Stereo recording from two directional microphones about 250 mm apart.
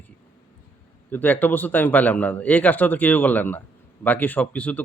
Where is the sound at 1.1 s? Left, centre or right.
Centre.